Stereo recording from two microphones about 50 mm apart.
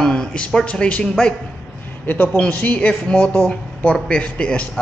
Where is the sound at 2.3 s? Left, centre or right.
Left.